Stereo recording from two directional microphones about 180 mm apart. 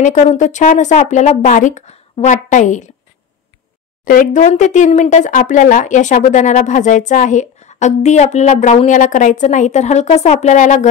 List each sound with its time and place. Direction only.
0.0 s speech: 40° left (ahead or behind)
4.0 s speech: 50° left (ahead or behind)